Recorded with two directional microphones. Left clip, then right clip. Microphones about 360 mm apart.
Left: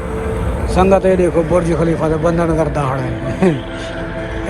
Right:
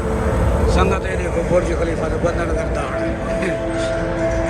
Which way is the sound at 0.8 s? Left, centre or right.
Centre.